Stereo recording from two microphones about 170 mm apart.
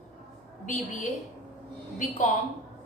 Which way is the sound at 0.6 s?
50° left (ahead or behind).